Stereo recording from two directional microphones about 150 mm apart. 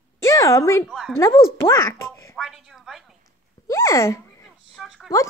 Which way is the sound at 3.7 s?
20° left (ahead or behind).